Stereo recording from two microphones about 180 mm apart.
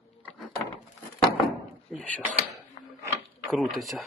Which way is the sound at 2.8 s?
40° left (ahead or behind).